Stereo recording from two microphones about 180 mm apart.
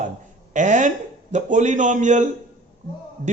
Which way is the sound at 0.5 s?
45° right (ahead or behind).